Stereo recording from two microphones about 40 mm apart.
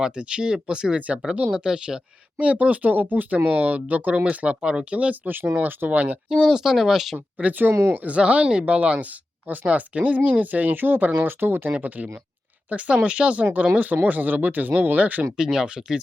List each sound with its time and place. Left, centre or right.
0.0 s speech: right
0.9 s speech: right
1.6 s speech: right
2.4 s speech: right
5.2 s speech: right
5.9 s speech: right
6.2 s speech: centre
7.3 s speech: right
7.6 s speech: right
8.0 s speech: right
11.8 s speech: right
13.4 s speech: right
15.4 s speech: centre